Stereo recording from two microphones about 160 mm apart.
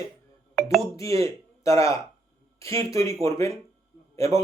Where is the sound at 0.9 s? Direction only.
20° left (ahead or behind).